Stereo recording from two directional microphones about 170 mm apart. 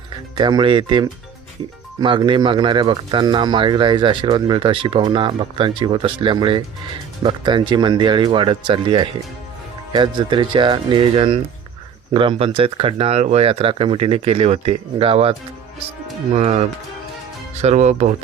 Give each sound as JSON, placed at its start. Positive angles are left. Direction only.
{"t": 0.3, "sound": "speech", "side_deg": -25}